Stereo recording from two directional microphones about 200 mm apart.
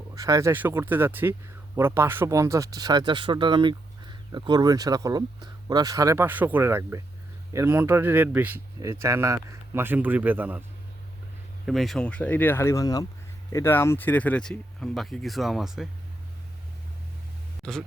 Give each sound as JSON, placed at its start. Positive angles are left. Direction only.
{"t": 0.1, "sound": "speech", "side_deg": -15}
{"t": 11.6, "sound": "speech", "side_deg": 0}
{"t": 17.6, "sound": "speech", "side_deg": 0}